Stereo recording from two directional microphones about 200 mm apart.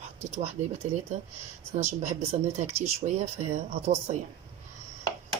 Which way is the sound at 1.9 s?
35° right (ahead or behind).